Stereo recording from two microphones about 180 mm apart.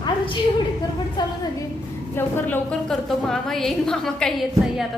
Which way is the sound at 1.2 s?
25° left (ahead or behind).